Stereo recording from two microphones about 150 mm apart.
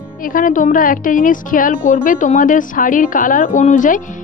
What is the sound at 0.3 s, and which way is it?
A woman's voice, 60° left (ahead or behind).